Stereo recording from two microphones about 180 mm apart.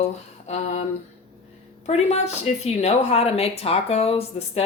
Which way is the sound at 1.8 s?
35° left (ahead or behind).